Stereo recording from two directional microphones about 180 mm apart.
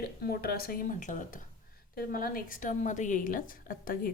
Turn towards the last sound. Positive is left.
turn(degrees=50)  # may be behind; listen again after turning